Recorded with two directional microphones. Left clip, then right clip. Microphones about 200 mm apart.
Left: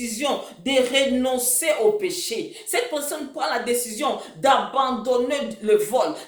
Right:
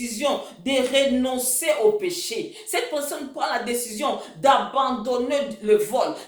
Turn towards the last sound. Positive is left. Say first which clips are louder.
# even
turn(degrees=15)  # may be behind; listen again after turning